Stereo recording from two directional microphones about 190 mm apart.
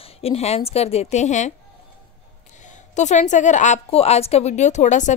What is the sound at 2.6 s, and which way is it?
A woman's voice, 40° left (ahead or behind).